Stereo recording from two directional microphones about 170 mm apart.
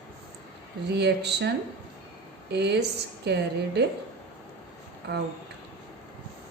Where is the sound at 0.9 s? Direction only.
80° right.